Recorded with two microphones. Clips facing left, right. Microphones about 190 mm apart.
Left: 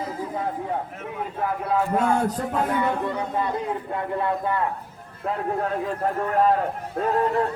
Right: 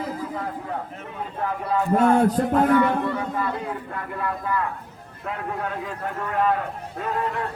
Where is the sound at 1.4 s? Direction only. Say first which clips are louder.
Left 1 dB; 5° left (ahead or behind).